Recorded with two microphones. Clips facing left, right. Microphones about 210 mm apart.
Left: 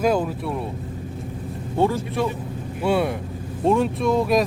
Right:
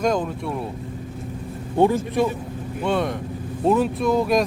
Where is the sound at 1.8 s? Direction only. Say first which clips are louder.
Right 3 dB; 15° right (ahead or behind).